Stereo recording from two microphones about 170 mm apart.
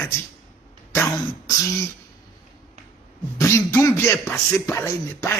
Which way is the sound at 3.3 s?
15° left (ahead or behind).